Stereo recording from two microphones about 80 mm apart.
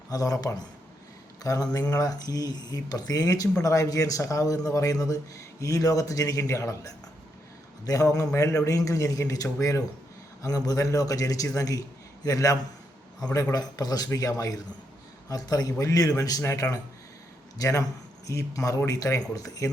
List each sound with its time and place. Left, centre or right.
0.1 s a man's voice: left
16.4 s a man's voice: left